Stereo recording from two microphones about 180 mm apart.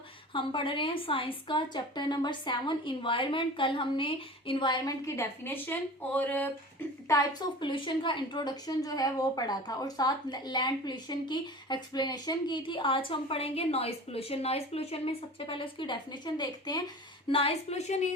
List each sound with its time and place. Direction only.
0.3 s a woman's voice: 30° left (ahead or behind); by 6.5 s 10° left (ahead or behind)
7.1 s a woman's voice: 25° left (ahead or behind)